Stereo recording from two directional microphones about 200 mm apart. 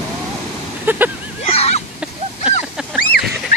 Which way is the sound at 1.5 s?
30° left (ahead or behind).